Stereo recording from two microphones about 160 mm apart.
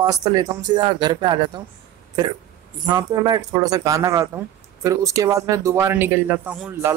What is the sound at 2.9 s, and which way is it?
Speech, 25° right (ahead or behind).